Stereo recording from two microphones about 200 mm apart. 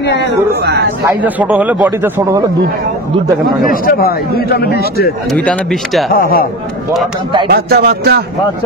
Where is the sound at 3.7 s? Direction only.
45° left (ahead or behind).